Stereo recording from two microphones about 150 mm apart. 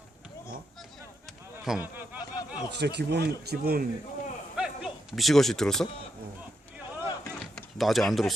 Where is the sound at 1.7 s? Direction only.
10° right (ahead or behind).